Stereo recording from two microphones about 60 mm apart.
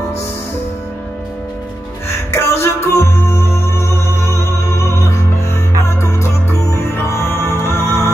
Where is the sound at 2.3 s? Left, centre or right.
Left.